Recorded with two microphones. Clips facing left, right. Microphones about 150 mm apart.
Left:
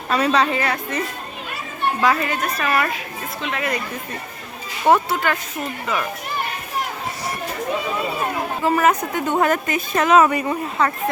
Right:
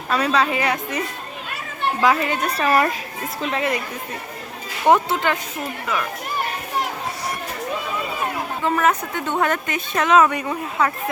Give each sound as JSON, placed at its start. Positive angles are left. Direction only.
{"t": 0.1, "sound": "a woman's voice", "side_deg": 0}
{"t": 0.6, "sound": "speech", "side_deg": -15}
{"t": 4.9, "sound": "speech", "side_deg": -20}
{"t": 8.6, "sound": "speech", "side_deg": 10}